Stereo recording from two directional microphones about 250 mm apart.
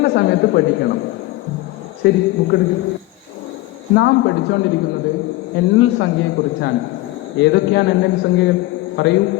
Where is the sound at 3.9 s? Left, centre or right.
Left.